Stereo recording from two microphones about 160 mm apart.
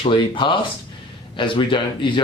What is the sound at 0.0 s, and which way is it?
Speech, 30° left (ahead or behind).